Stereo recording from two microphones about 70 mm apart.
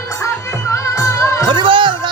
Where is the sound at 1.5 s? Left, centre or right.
Right.